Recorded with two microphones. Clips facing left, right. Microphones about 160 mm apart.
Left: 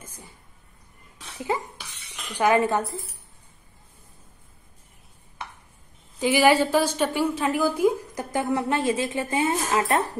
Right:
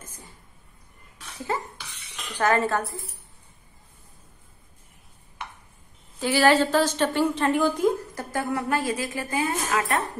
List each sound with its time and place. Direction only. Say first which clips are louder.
1.4 s cough: left 2 dB; 15° left (ahead or behind)
2.3 s a woman's voice: left 2 dB; 15° left (ahead or behind)
6.1 s a woman's voice: left 1 dB; 15° left (ahead or behind)